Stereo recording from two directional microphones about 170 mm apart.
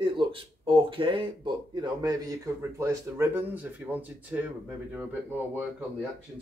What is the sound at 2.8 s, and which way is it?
Speech, 15° right (ahead or behind).